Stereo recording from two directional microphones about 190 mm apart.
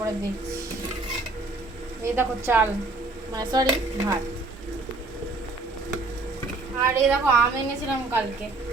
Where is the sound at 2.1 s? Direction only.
10° right (ahead or behind).